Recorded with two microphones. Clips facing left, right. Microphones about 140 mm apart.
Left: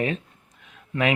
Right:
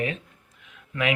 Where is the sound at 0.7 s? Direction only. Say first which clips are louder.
Left 3 dB; 35° left (ahead or behind).